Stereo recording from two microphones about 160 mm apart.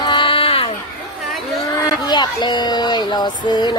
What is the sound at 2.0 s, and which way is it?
Speech, 25° left (ahead or behind).